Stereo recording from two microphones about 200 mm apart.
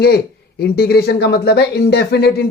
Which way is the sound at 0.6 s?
50° left (ahead or behind).